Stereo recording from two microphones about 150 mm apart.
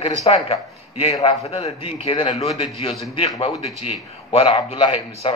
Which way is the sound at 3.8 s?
40° left (ahead or behind).